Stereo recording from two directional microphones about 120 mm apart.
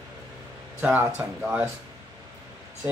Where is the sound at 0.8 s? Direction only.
15° right (ahead or behind).